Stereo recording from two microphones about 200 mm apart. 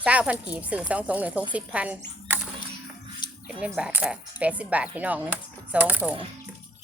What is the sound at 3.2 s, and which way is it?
Music, 20° left (ahead or behind).